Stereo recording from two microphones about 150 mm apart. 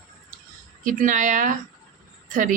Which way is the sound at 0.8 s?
60° right (ahead or behind).